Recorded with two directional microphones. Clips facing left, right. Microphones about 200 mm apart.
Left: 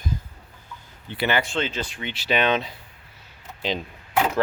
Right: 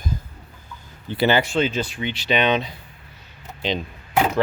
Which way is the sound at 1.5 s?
15° right (ahead or behind).